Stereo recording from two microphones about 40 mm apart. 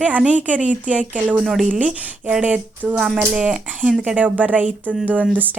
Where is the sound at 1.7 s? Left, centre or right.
Right.